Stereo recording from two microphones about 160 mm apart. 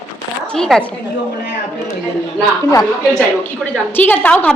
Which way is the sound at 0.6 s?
5° left (ahead or behind).